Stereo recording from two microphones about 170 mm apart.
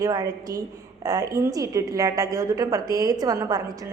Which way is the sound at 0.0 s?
20° right (ahead or behind).